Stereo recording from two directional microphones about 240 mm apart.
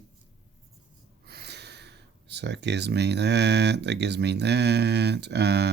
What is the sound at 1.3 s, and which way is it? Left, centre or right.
Speech, right.